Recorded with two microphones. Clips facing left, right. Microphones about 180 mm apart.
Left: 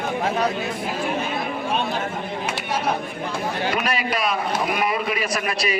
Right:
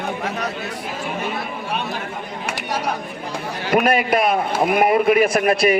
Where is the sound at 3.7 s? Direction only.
55° right (ahead or behind).